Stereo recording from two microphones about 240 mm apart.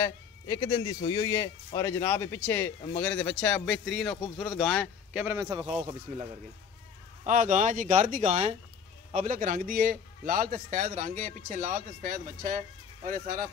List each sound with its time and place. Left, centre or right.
0.0 s speech: centre; by 5.8 s right
6.1 s speech: right
7.2 s speech: right